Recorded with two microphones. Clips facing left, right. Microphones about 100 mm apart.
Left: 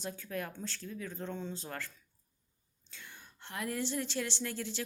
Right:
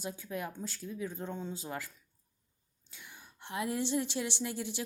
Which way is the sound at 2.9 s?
15° right (ahead or behind).